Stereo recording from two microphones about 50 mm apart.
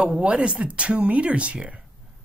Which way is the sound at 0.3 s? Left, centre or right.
Right.